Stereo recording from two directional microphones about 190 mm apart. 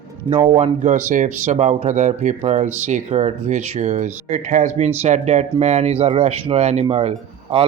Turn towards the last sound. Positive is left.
turn(degrees=-30)  # may be behind; listen again after turning